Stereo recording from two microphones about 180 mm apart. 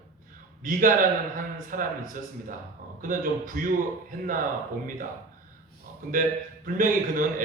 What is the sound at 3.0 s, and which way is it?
Speech, 50° right (ahead or behind).